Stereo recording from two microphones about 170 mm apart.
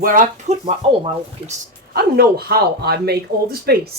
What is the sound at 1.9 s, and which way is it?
Speech, 65° right (ahead or behind).